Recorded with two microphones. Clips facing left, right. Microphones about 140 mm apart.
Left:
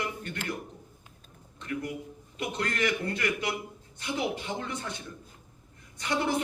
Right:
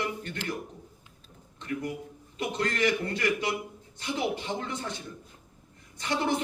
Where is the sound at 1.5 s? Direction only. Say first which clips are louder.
Right 1 dB; 25° right (ahead or behind).